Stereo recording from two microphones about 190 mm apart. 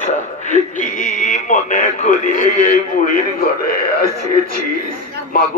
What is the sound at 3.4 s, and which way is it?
Speech, 50° left (ahead or behind).